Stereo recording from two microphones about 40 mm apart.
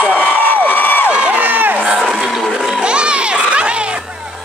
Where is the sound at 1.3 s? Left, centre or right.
Right.